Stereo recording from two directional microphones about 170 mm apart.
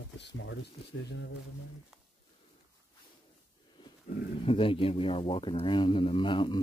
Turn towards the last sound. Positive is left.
turn(degrees=30)  # may be behind; listen again after turning